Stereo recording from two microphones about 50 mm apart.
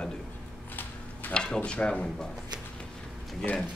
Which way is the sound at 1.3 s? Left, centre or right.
Centre.